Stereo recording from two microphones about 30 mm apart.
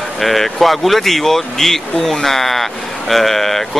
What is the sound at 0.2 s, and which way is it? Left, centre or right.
Speech, centre.